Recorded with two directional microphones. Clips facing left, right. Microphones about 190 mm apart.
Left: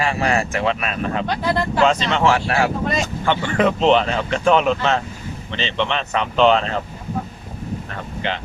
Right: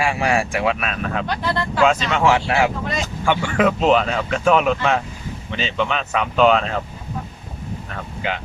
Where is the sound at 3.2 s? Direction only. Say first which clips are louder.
Right 1 dB; 5° right (ahead or behind).